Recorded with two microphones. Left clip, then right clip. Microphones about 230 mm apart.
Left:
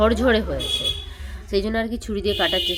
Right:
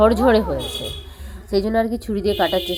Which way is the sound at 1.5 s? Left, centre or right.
Centre.